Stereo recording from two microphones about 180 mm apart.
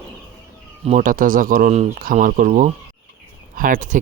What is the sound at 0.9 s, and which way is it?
Speech, 45° right (ahead or behind).